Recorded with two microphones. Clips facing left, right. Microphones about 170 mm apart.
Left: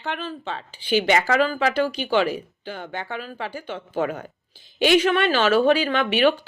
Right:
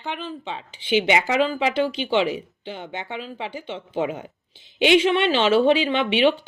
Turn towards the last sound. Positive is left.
turn(degrees=-25)  # may be behind; listen again after turning